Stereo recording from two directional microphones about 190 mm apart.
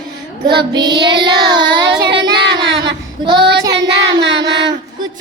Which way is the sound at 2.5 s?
25° right (ahead or behind).